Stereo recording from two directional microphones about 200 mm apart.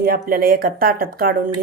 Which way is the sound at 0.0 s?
50° right (ahead or behind).